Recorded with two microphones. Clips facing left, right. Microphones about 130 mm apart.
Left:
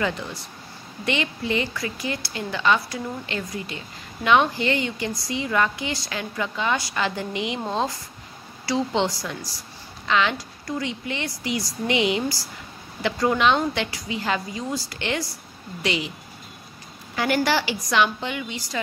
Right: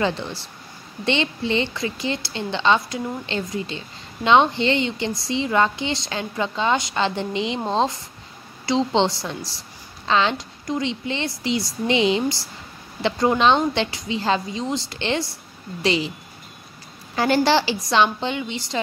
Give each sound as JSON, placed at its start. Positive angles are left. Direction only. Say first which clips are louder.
{"t": 0.0, "sound": "a woman's voice", "louder": "right 3 dB", "side_deg": -30}
{"t": 17.1, "sound": "a woman's voice", "louder": "right 4 dB", "side_deg": -30}